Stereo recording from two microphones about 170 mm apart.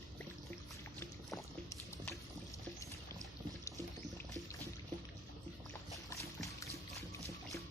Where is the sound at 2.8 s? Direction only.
20° left (ahead or behind).